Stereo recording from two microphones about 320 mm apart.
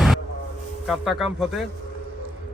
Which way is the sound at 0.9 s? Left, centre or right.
Centre.